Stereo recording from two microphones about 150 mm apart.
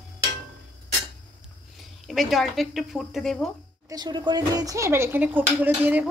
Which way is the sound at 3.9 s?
25° right (ahead or behind).